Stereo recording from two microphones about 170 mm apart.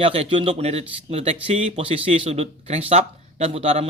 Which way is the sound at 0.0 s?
35° right (ahead or behind).